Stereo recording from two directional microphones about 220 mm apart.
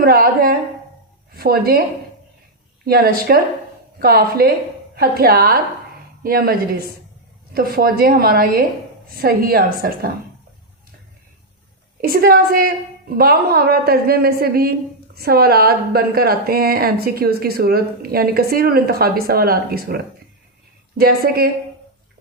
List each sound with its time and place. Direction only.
0.0 s a woman's voice: 40° right (ahead or behind)
2.8 s a woman's voice: 45° right (ahead or behind)
12.0 s a woman's voice: 45° right (ahead or behind)
21.0 s a woman's voice: 45° right (ahead or behind)